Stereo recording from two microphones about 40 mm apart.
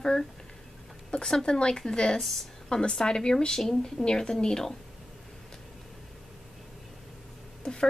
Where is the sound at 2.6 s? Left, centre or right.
Centre.